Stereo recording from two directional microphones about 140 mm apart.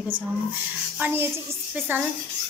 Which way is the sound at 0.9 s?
15° right (ahead or behind).